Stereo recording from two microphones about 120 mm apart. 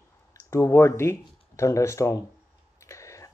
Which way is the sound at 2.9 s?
25° left (ahead or behind).